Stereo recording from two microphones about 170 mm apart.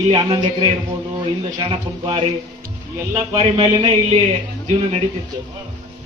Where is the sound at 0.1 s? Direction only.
25° right (ahead or behind).